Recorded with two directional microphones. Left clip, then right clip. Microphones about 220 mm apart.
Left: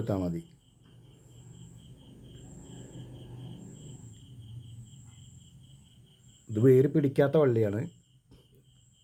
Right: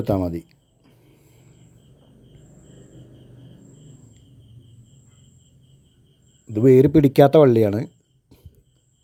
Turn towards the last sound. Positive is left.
turn(degrees=-35)  # may be behind; listen again after turning